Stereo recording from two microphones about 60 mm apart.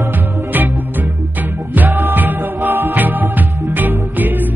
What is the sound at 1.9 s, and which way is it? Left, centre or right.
Music, right.